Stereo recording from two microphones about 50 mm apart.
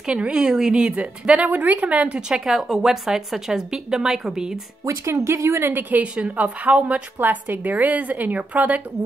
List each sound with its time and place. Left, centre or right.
0.0 s a woman's voice: centre
2.1 s speech: centre
4.8 s speech: right
5.6 s a woman's voice: right
6.1 s a woman's voice: right
7.2 s a woman's voice: right